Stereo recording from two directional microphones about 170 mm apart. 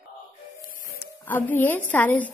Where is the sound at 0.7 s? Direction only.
55° left (ahead or behind).